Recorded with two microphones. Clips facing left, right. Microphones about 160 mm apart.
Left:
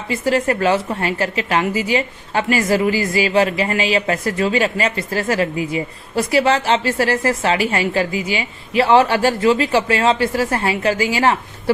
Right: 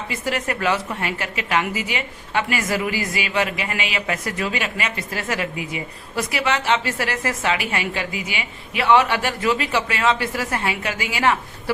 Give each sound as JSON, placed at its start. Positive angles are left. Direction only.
{"t": 0.1, "sound": "a woman's voice", "side_deg": 30}